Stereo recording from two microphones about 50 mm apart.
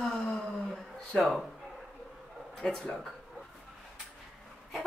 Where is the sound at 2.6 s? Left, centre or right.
Centre.